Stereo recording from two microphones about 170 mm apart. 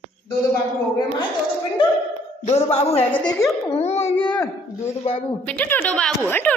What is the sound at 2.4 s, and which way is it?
A child's voice, 40° left (ahead or behind).